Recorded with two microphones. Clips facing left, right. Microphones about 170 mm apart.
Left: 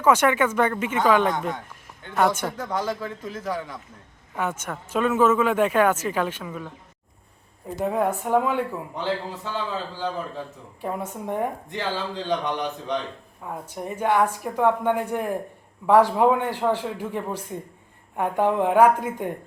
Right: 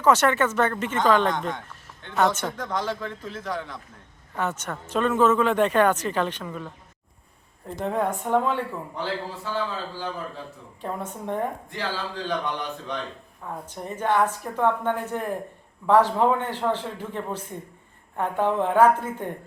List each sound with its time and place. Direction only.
0.0 s speech: 10° left (ahead or behind)
7.7 s speech: 10° left (ahead or behind)